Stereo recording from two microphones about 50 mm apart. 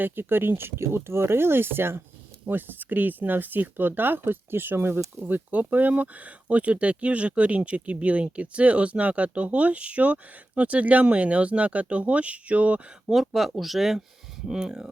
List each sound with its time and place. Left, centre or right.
0.0 s speech: right
2.5 s speech: right
5.1 s speech: right
13.1 s speech: centre